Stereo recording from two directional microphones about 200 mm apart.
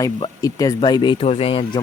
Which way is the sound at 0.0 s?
15° left (ahead or behind).